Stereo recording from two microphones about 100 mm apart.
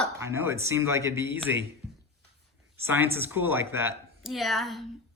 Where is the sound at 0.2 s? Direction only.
25° right (ahead or behind).